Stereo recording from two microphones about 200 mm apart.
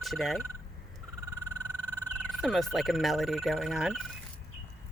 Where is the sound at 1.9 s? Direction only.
Centre (ahead or behind).